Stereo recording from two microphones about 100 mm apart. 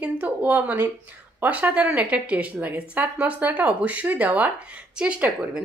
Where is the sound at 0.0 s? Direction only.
15° right (ahead or behind).